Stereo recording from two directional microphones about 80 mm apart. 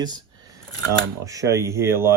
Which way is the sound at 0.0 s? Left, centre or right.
Right.